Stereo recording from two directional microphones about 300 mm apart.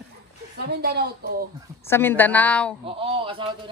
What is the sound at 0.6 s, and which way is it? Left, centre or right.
Speech, right.